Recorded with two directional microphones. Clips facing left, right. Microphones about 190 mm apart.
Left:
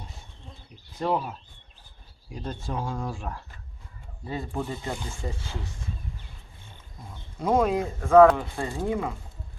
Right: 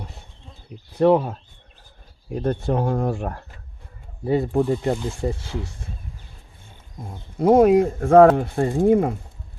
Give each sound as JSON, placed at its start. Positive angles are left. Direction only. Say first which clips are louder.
{"t": 0.9, "sound": "speech", "louder": "right 11 dB", "side_deg": -60}
{"t": 2.3, "sound": "speech", "louder": "right 11 dB", "side_deg": -60}
{"t": 7.0, "sound": "speech", "louder": "right 10 dB", "side_deg": -55}